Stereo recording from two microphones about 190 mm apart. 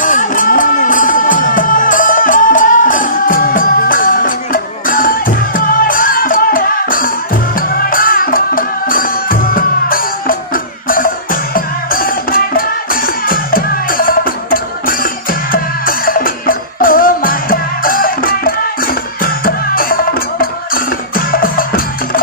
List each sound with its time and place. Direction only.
0.0 s music: 45° left (ahead or behind)